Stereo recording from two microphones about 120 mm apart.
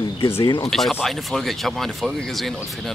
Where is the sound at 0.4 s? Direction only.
35° left (ahead or behind).